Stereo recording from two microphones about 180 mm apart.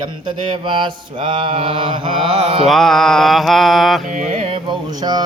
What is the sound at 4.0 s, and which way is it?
Mantra, 45° right (ahead or behind).